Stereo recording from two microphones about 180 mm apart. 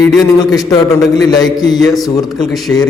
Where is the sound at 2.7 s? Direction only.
10° left (ahead or behind).